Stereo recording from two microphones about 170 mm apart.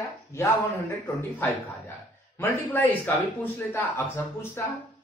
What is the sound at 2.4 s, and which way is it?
A man's voice, 10° left (ahead or behind).